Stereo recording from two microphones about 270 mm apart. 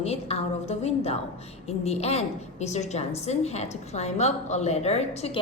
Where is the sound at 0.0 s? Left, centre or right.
Left.